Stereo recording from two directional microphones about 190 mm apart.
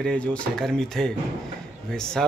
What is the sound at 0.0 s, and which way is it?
Speech, 5° left (ahead or behind).